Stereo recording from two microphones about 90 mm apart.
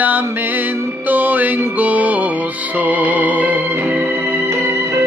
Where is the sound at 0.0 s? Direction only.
20° right (ahead or behind).